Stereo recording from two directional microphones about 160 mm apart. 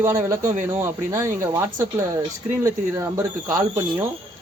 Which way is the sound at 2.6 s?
20° right (ahead or behind).